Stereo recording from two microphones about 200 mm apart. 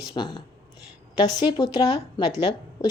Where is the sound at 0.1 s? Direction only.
20° left (ahead or behind).